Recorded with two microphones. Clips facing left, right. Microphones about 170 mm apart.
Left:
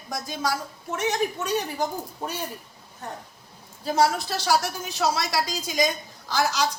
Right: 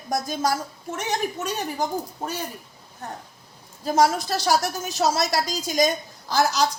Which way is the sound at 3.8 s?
45° right (ahead or behind).